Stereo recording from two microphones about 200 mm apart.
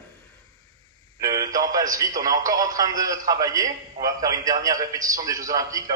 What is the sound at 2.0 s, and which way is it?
A man's voice, 15° right (ahead or behind).